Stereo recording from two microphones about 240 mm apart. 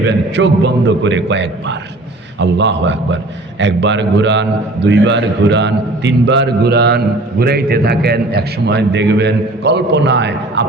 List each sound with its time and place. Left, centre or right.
0.3 s a man's voice: right